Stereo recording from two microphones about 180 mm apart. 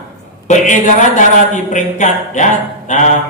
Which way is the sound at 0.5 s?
40° left (ahead or behind).